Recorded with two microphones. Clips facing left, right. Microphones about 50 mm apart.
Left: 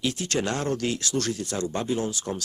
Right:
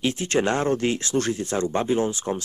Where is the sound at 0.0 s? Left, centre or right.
Right.